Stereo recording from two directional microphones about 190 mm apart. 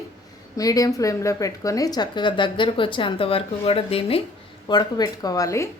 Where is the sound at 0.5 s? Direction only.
20° left (ahead or behind).